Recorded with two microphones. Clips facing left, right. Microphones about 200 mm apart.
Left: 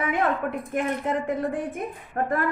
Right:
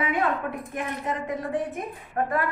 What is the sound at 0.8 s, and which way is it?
A woman's voice, 55° left (ahead or behind).